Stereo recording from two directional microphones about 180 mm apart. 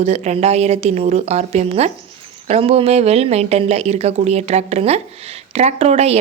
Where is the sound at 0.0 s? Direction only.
35° right (ahead or behind).